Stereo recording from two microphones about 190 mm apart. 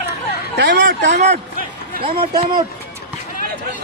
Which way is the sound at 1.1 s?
35° right (ahead or behind).